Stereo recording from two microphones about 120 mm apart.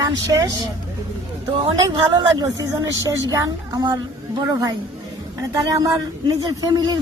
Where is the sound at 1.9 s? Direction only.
35° right (ahead or behind).